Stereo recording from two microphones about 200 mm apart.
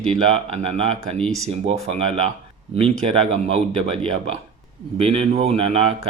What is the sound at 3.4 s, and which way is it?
Speech, 30° right (ahead or behind).